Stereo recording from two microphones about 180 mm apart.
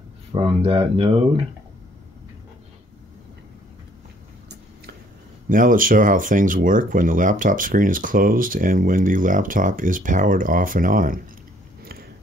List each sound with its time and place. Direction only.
0.3 s speech: 30° right (ahead or behind)
5.5 s speech: 50° right (ahead or behind)